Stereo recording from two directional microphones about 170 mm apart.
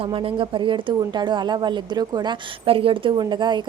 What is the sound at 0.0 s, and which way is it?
Speech, 30° right (ahead or behind).